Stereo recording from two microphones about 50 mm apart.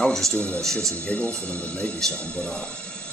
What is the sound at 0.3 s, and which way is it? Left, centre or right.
Speech, left.